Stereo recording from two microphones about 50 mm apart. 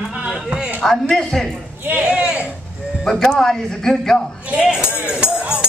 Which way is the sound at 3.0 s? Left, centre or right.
Centre.